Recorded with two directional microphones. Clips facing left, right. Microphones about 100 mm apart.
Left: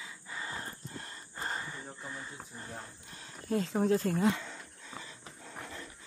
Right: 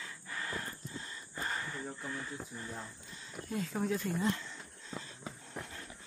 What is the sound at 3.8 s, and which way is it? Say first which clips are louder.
Speech: left 7 dB; 45° left (ahead or behind).